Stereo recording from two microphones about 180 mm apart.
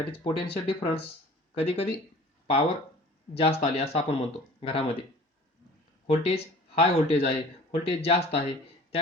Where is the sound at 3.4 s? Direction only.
35° left (ahead or behind).